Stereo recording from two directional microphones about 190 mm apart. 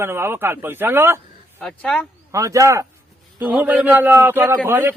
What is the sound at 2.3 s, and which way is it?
Speech, 15° right (ahead or behind).